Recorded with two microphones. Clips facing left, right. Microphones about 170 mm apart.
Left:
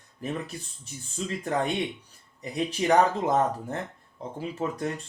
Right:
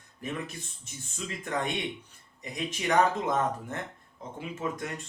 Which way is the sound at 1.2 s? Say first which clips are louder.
Left 5 dB; 35° left (ahead or behind).